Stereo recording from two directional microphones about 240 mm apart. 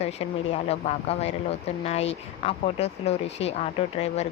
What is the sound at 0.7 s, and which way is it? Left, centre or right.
Speech, left.